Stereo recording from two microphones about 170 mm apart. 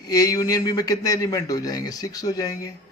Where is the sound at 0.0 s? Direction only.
20° left (ahead or behind).